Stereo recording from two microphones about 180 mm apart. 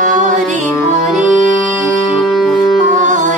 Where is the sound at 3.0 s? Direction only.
45° right (ahead or behind).